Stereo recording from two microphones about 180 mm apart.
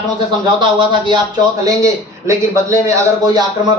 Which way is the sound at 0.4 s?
25° right (ahead or behind).